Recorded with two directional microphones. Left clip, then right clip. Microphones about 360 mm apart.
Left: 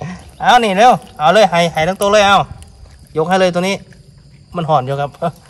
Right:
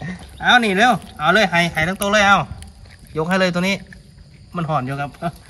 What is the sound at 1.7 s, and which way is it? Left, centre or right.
Speech, centre.